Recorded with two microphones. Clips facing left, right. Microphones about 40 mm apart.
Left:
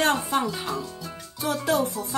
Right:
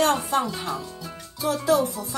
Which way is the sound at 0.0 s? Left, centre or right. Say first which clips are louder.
Right 1 dB; left.